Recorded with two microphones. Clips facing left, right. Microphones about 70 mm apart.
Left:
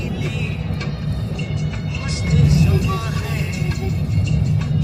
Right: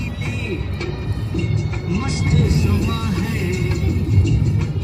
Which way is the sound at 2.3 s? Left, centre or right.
Right.